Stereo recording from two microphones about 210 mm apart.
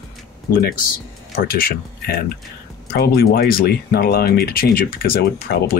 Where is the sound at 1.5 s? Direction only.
45° left (ahead or behind).